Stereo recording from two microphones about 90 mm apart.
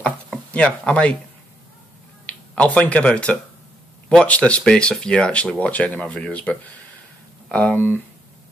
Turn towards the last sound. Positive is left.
turn(degrees=20)  # may be behind; listen again after turning